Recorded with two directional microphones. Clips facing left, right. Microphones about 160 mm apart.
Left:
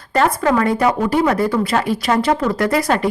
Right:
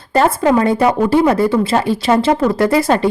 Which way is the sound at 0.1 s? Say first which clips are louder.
Right 3 dB; 25° right (ahead or behind).